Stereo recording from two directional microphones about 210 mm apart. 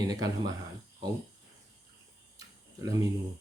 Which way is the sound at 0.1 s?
15° right (ahead or behind).